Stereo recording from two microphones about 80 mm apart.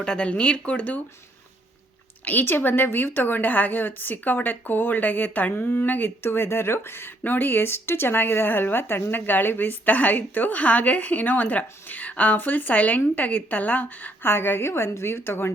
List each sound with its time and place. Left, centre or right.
0.0 s speech: centre
2.2 s a woman's voice: left